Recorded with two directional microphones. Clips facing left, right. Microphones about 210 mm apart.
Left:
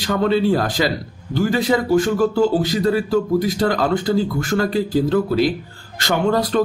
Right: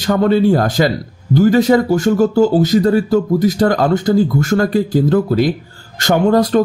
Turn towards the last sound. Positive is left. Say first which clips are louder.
# right 5 dB
turn(degrees=-45)  # may be behind; listen again after turning